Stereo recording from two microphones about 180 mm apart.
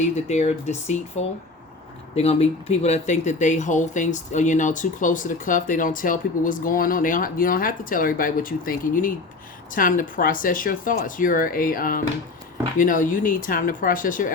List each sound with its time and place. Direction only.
0.3 s speech: 40° left (ahead or behind)